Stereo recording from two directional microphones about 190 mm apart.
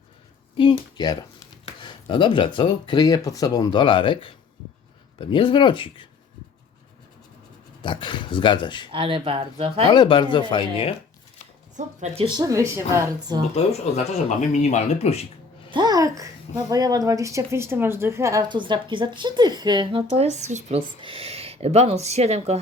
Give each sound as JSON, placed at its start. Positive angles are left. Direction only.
{"t": 0.5, "sound": "speech", "side_deg": 25}
{"t": 7.8, "sound": "speech", "side_deg": 25}
{"t": 8.9, "sound": "a child's voice", "side_deg": -30}
{"t": 9.9, "sound": "speech", "side_deg": 25}
{"t": 11.9, "sound": "speech", "side_deg": -35}
{"t": 12.5, "sound": "a woman's voice", "side_deg": -15}
{"t": 13.9, "sound": "speech", "side_deg": 35}
{"t": 15.7, "sound": "a child's voice", "side_deg": -20}